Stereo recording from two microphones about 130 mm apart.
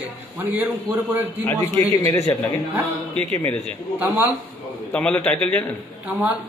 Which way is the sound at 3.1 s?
55° right (ahead or behind).